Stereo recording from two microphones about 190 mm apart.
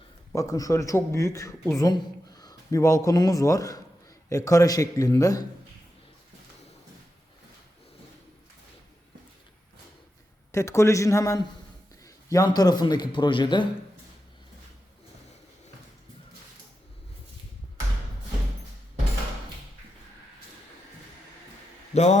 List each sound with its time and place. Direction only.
0.3 s a man's voice: 15° left (ahead or behind)
10.5 s a man's voice: 15° left (ahead or behind)
21.9 s a man's voice: 35° left (ahead or behind)